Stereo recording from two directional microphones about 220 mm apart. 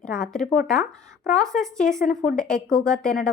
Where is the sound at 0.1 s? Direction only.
5° left (ahead or behind).